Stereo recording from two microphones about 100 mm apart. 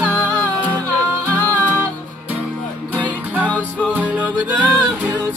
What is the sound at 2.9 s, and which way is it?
Music, 15° right (ahead or behind).